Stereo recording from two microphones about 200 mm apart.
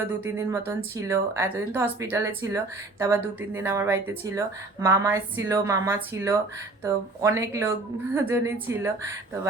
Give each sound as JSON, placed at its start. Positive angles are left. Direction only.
{"t": 0.1, "sound": "speech", "side_deg": -10}